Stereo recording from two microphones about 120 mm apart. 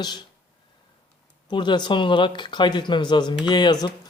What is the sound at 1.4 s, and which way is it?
Speech, 40° left (ahead or behind).